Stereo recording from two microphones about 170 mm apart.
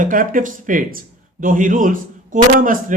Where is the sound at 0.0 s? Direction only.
55° right (ahead or behind).